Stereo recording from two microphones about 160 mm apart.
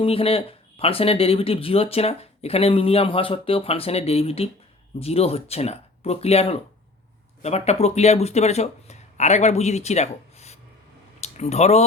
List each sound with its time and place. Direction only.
0.0 s speech: 35° left (ahead or behind)